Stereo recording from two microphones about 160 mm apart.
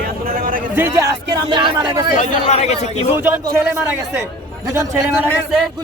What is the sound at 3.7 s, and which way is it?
A man's voice, 15° right (ahead or behind).